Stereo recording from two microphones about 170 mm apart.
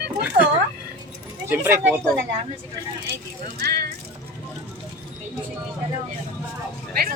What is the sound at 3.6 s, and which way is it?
Speech, 65° right (ahead or behind).